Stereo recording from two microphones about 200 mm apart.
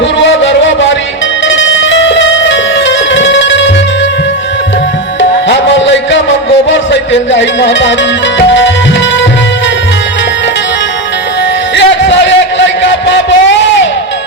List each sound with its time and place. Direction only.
1.5 s music: 70° left (ahead or behind)
5.5 s music: 65° left (ahead or behind)
11.7 s music: 65° left (ahead or behind)